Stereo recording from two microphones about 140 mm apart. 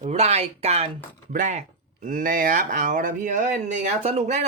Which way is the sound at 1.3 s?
60° right (ahead or behind).